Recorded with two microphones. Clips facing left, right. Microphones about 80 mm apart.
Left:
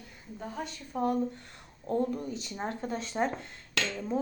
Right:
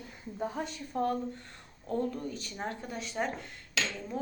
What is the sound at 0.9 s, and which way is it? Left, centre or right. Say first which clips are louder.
Speech: left 1 dB; centre.